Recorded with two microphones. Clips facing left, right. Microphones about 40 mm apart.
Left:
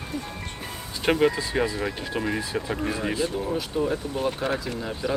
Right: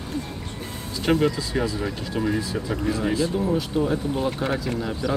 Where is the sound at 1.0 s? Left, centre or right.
Left.